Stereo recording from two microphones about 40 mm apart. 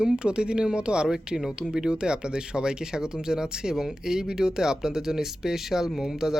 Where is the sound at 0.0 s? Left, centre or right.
Right.